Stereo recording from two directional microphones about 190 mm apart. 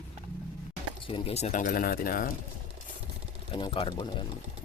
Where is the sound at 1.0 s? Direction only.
30° left (ahead or behind); by 2.3 s 50° left (ahead or behind).